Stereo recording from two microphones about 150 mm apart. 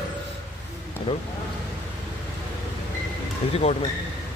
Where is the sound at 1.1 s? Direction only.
35° left (ahead or behind).